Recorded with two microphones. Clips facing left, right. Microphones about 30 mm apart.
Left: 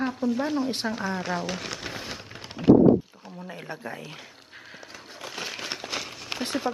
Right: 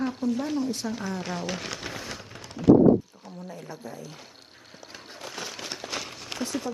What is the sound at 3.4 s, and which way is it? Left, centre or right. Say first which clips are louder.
Speech: left 3 dB; left.